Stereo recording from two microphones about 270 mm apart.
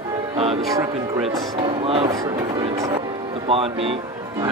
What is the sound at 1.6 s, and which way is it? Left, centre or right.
Speech, centre.